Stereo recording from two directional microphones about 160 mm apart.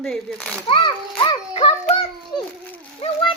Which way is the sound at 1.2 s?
35° left (ahead or behind).